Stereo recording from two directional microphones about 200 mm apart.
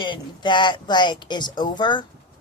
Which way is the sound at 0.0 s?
25° left (ahead or behind).